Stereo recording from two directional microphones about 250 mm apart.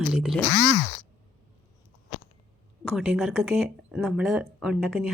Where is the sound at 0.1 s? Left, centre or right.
Centre.